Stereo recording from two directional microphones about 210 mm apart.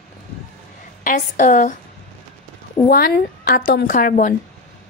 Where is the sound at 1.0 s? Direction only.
40° left (ahead or behind).